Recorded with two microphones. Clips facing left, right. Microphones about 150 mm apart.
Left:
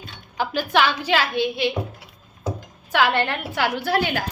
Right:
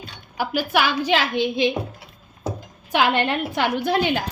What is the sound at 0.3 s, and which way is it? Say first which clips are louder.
A woman's voice: left 1 dB; 10° right (ahead or behind).